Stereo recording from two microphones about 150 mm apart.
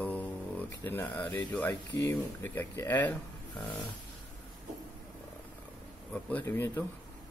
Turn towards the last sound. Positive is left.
turn(degrees=15)  # may be behind; listen again after turning